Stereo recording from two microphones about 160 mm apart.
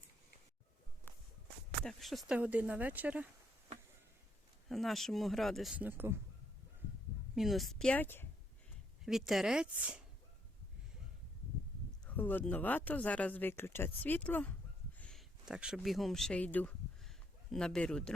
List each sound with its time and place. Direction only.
1.8 s speech: centre (ahead or behind)
4.7 s speech: centre (ahead or behind)
7.3 s speech: centre (ahead or behind)
9.0 s speech: centre (ahead or behind)
12.0 s speech: 10° left (ahead or behind)
14.9 s a sound: 5° left (ahead or behind)
15.4 s speech: 5° right (ahead or behind)